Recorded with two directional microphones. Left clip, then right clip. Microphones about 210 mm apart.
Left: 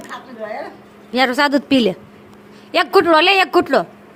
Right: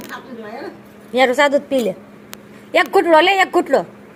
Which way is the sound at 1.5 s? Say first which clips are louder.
Left 1 dB; 30° left (ahead or behind).